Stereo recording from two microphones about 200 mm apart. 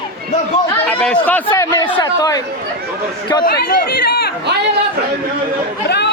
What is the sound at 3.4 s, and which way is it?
Speech, 50° left (ahead or behind).